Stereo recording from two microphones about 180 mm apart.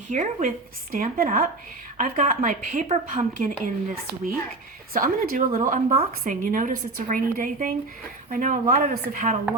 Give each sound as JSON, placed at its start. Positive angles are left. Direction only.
{"t": 0.1, "sound": "speech", "side_deg": -45}